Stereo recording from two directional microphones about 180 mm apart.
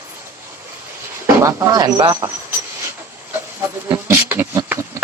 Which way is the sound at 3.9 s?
15° right (ahead or behind).